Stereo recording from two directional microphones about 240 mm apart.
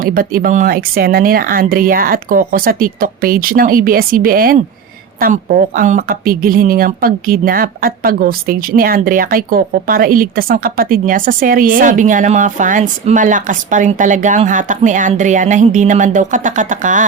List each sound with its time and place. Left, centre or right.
0.0 s speech: right